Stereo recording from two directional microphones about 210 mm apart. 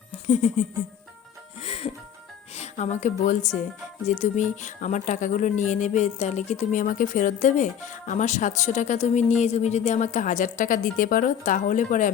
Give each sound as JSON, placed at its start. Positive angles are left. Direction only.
{"t": 0.3, "sound": "speech", "side_deg": 35}
{"t": 1.6, "sound": "music", "side_deg": 30}
{"t": 2.6, "sound": "a woman's voice", "side_deg": 35}